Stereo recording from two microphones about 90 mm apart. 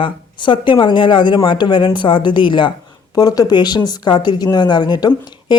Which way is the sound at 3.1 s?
45° left (ahead or behind).